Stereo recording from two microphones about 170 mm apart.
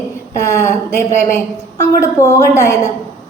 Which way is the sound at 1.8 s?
20° left (ahead or behind).